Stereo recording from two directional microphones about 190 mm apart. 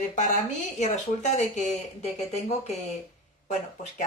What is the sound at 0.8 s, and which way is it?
Speech, 40° left (ahead or behind).